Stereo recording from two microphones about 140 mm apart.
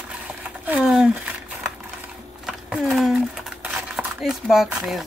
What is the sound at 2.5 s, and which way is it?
Speech, 5° right (ahead or behind).